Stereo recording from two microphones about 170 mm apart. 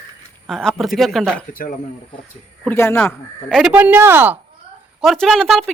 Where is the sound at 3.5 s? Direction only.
5° right (ahead or behind).